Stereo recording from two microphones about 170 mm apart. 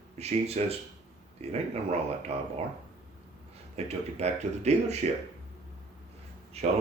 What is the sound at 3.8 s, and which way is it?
Speech, 40° right (ahead or behind).